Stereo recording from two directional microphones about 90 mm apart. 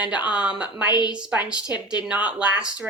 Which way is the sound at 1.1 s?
10° right (ahead or behind).